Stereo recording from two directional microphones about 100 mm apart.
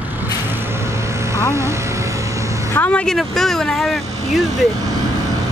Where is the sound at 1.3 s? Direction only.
30° right (ahead or behind).